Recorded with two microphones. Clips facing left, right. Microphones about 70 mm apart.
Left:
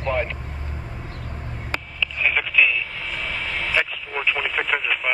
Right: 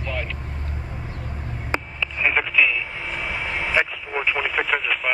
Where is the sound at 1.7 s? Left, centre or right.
Centre.